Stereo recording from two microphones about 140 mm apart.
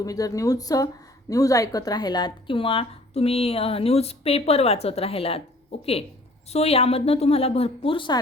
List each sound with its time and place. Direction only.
0.0 s speech: 25° left (ahead or behind); by 5.4 s 45° left (ahead or behind)
6.5 s speech: 45° left (ahead or behind)